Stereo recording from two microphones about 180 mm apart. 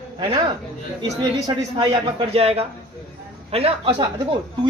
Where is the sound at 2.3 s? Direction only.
35° right (ahead or behind).